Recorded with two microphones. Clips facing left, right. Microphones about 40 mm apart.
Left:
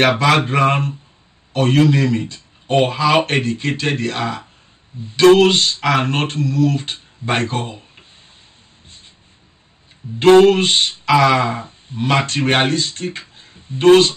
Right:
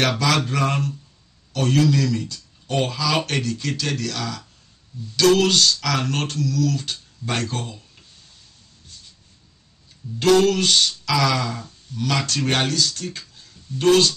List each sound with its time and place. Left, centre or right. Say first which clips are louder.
0.0 s speech: left 6 dB; left
8.8 s train: left 1 dB; left
10.1 s speech: left 7 dB; left